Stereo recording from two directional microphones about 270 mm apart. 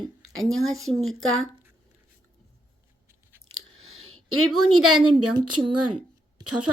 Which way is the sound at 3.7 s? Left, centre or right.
Right.